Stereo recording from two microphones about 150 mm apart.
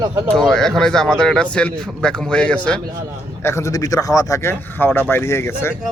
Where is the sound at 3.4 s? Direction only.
20° left (ahead or behind).